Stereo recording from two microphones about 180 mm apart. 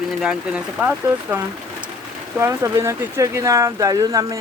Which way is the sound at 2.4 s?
15° right (ahead or behind).